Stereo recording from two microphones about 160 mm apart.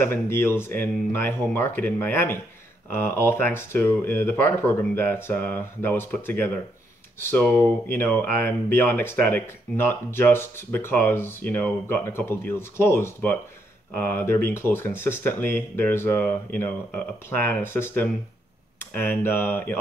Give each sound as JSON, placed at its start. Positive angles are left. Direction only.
{"t": 0.0, "sound": "speech", "side_deg": 15}